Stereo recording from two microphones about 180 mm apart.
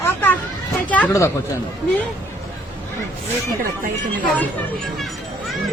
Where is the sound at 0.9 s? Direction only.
10° left (ahead or behind).